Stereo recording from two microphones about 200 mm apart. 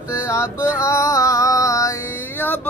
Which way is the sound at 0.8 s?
15° left (ahead or behind).